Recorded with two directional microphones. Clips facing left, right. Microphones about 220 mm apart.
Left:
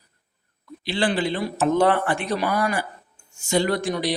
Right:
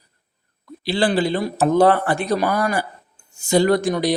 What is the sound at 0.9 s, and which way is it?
A man's voice, 35° right (ahead or behind).